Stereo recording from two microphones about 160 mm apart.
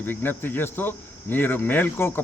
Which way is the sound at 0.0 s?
15° left (ahead or behind).